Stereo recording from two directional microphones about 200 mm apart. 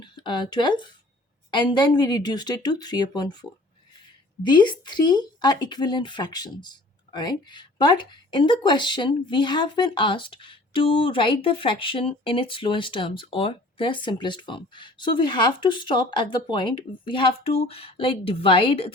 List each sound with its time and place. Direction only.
0.0 s speech: 20° left (ahead or behind)
4.4 s speech: 20° left (ahead or behind)